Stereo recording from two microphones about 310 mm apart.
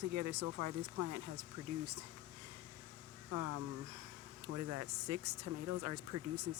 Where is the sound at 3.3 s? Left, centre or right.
Right.